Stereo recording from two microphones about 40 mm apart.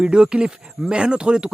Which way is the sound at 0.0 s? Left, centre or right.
Right.